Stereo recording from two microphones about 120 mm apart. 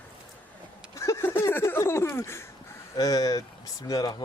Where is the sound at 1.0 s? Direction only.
20° left (ahead or behind).